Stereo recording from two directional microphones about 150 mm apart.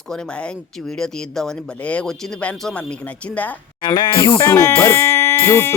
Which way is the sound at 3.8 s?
30° left (ahead or behind).